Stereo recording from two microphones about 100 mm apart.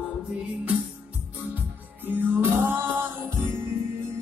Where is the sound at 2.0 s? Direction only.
20° right (ahead or behind).